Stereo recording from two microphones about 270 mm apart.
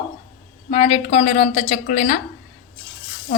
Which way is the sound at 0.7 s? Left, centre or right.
Left.